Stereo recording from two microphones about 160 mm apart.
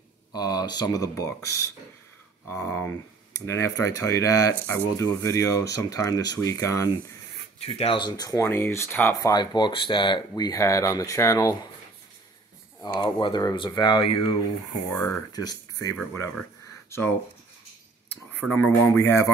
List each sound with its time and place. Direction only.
0.3 s speech: 25° left (ahead or behind)
7.6 s speech: 40° left (ahead or behind); by 11.5 s 20° left (ahead or behind)
12.8 s speech: 25° left (ahead or behind)
14.9 s speech: 15° left (ahead or behind)
18.5 s speech: 10° left (ahead or behind)